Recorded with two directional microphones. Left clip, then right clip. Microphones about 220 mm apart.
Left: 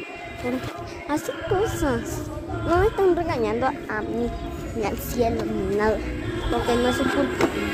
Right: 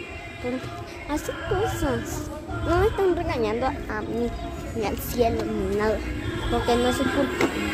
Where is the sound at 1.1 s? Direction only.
15° left (ahead or behind).